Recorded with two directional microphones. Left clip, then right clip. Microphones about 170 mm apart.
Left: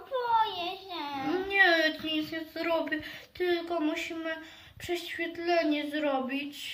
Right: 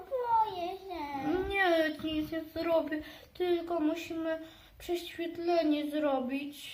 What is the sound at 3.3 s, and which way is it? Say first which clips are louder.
A woman's voice: left 1 dB; 10° right (ahead or behind).